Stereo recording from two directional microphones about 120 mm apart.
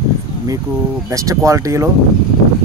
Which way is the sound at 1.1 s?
25° right (ahead or behind).